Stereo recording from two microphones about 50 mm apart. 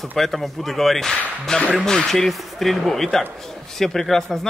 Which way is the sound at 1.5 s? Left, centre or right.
Centre.